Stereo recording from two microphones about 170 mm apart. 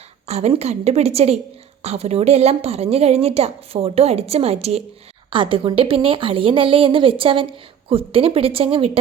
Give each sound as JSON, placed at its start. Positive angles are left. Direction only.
{"t": 0.3, "sound": "a woman's voice", "side_deg": -35}